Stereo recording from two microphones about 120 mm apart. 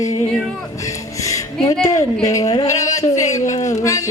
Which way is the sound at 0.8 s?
25° left (ahead or behind).